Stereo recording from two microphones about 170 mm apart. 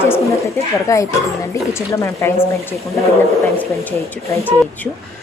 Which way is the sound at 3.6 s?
15° left (ahead or behind).